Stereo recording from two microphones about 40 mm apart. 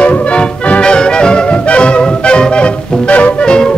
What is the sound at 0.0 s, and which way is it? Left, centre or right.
Music, left.